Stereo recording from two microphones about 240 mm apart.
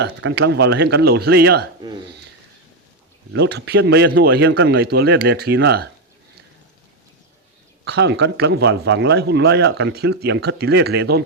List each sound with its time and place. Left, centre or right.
0.0 s speech: right
3.3 s speech: right
7.9 s speech: right